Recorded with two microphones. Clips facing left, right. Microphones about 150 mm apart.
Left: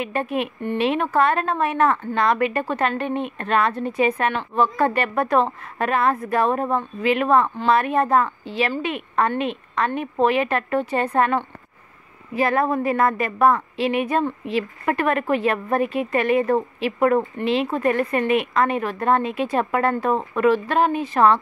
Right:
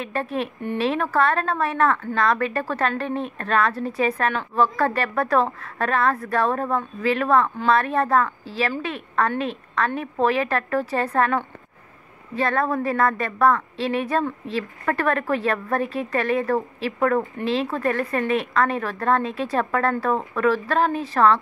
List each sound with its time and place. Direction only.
0.0 s speech: centre (ahead or behind)
12.8 s speech: centre (ahead or behind)